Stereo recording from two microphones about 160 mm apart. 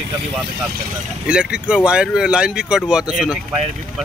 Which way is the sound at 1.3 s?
5° right (ahead or behind).